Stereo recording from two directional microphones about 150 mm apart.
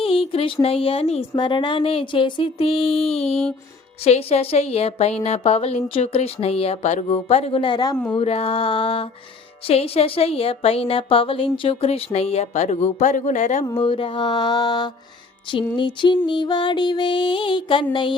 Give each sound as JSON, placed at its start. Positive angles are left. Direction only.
{"t": 0.0, "sound": "a woman's voice", "side_deg": 40}
{"t": 8.2, "sound": "a woman's voice", "side_deg": 40}
{"t": 13.7, "sound": "mantra", "side_deg": 35}
{"t": 15.7, "sound": "a woman's voice", "side_deg": 30}